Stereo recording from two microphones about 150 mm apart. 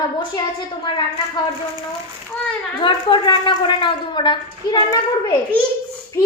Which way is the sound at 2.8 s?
35° left (ahead or behind).